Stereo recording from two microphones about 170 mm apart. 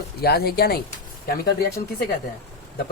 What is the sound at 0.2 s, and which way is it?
Speech, 70° left (ahead or behind).